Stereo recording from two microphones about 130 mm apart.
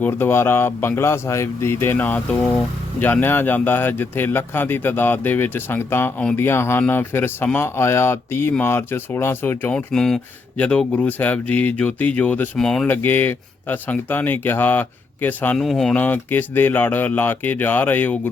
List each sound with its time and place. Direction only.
0.0 s speech: 15° left (ahead or behind)
12.9 s speech: 15° left (ahead or behind)
15.5 s speech: centre (ahead or behind)